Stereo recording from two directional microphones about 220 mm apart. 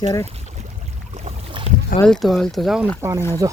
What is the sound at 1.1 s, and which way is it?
Boat, 30° right (ahead or behind).